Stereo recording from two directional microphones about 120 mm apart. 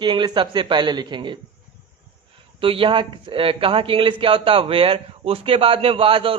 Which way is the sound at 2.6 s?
45° right (ahead or behind).